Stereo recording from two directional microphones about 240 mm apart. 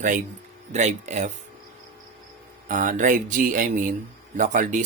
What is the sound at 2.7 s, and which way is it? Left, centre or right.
Speech, right.